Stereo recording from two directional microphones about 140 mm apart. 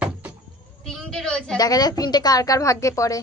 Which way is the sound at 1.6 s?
30° left (ahead or behind).